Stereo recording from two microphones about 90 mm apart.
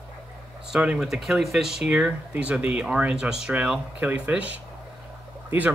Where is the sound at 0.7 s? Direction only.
10° right (ahead or behind).